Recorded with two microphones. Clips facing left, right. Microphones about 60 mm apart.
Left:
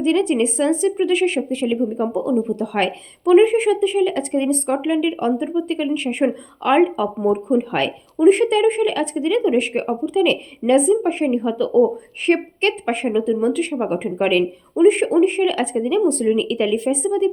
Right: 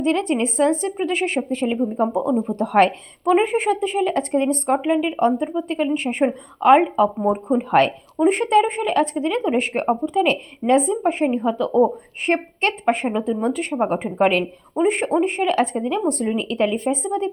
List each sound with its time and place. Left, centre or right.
0.0 s a woman's voice: right